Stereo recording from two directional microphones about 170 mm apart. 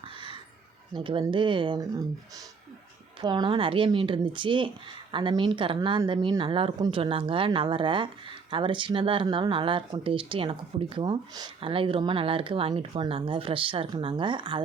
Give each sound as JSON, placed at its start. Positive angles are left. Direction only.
{"t": 0.9, "sound": "speech", "side_deg": -30}
{"t": 3.2, "sound": "speech", "side_deg": -25}